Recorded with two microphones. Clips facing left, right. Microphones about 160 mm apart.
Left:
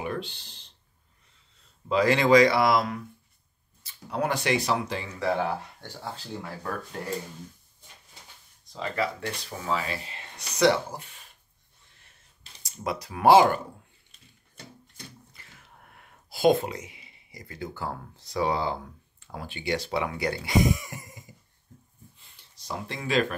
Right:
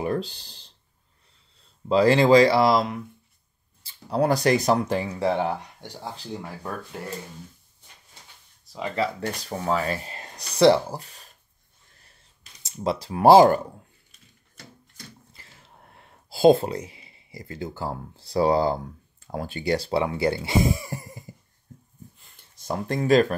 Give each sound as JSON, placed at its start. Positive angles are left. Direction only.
{"t": 0.0, "sound": "speech", "side_deg": -35}
{"t": 1.9, "sound": "speech", "side_deg": -30}
{"t": 5.2, "sound": "speech", "side_deg": -20}
{"t": 7.0, "sound": "speech", "side_deg": 0}
{"t": 9.2, "sound": "speech", "side_deg": -40}
{"t": 12.6, "sound": "speech", "side_deg": -30}
{"t": 15.3, "sound": "a sound", "side_deg": -30}
{"t": 19.3, "sound": "speech", "side_deg": -40}
{"t": 22.2, "sound": "a sound", "side_deg": -45}